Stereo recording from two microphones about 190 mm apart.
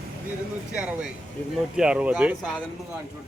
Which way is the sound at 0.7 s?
5° right (ahead or behind).